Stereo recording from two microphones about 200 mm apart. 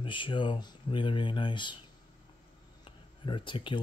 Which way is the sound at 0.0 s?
25° left (ahead or behind).